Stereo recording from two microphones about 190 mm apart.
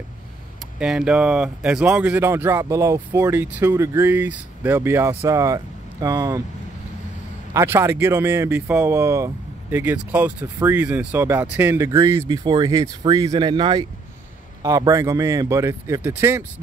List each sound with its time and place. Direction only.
0.7 s speech: 5° right (ahead or behind)
7.5 s speech: 15° right (ahead or behind)